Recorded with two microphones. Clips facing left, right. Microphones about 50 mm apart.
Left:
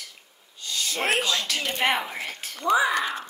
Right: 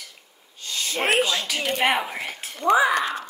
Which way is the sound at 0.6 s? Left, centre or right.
Right.